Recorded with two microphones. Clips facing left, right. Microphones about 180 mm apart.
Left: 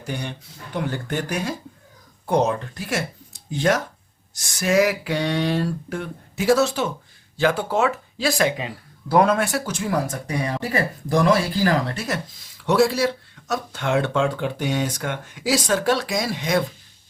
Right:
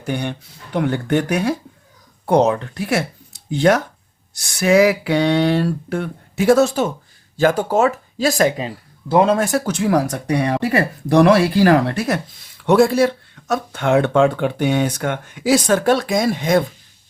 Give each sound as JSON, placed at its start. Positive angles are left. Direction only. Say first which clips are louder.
{"t": 0.0, "sound": "speech", "louder": "right 7 dB", "side_deg": -60}
{"t": 9.0, "sound": "speech", "louder": "right 3 dB", "side_deg": -25}
{"t": 9.4, "sound": "speech", "louder": "right 6 dB", "side_deg": -50}